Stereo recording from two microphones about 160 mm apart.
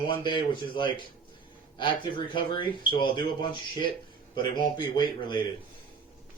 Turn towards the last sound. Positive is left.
turn(degrees=30)  # may be behind; listen again after turning